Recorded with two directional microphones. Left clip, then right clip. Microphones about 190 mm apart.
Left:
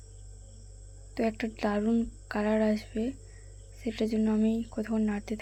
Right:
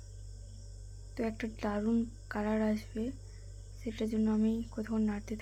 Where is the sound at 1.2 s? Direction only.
20° left (ahead or behind).